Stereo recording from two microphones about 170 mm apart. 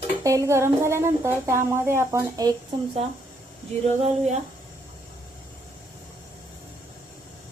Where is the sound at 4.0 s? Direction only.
40° right (ahead or behind).